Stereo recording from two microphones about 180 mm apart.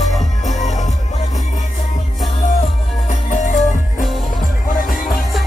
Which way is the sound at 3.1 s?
45° left (ahead or behind).